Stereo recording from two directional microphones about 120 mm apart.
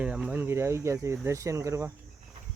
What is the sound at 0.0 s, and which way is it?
Speech, 5° right (ahead or behind).